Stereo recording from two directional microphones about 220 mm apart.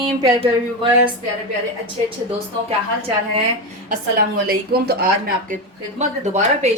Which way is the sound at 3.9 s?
40° right (ahead or behind).